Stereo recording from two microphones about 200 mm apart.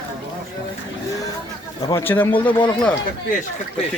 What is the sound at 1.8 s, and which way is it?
Speech, 15° left (ahead or behind).